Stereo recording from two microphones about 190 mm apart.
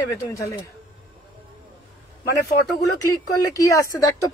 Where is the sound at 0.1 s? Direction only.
15° left (ahead or behind).